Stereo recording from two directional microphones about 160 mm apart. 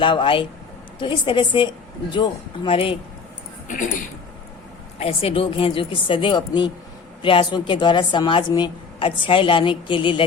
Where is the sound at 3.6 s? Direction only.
55° left (ahead or behind).